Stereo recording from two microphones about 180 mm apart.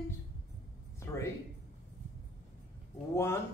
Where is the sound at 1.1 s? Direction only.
15° left (ahead or behind).